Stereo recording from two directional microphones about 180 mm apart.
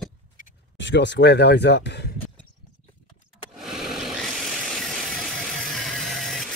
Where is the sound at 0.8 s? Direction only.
80° left.